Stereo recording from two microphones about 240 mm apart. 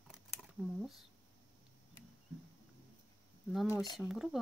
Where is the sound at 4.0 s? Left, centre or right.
Centre.